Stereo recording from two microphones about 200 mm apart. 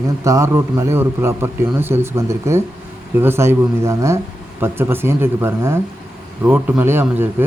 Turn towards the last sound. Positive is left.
turn(degrees=-10)  # may be behind; listen again after turning